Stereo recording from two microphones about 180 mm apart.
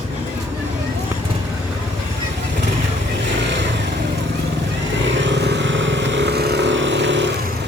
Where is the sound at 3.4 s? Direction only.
80° right.